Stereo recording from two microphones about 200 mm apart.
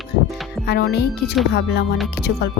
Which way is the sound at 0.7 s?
55° left (ahead or behind).